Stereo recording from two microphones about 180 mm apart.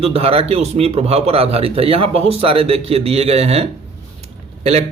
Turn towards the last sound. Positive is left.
turn(degrees=-35)  # may be behind; listen again after turning